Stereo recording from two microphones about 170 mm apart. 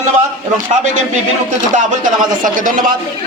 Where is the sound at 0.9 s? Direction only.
45° right (ahead or behind).